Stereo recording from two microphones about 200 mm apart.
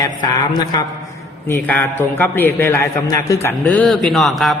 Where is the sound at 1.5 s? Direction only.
10° left (ahead or behind).